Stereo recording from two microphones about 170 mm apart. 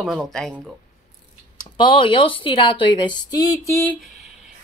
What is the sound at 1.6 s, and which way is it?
Speech, 30° left (ahead or behind).